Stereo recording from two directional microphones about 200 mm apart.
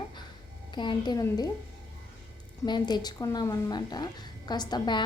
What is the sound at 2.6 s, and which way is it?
A woman's voice, 20° left (ahead or behind).